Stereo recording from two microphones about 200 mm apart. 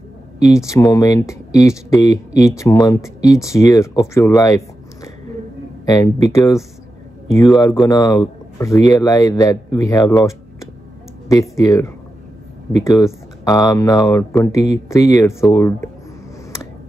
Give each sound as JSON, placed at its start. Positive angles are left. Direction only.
{"t": 0.4, "sound": "speech", "side_deg": 15}
{"t": 6.3, "sound": "speech", "side_deg": 15}
{"t": 10.1, "sound": "a sound", "side_deg": 15}
{"t": 11.2, "sound": "speech", "side_deg": 15}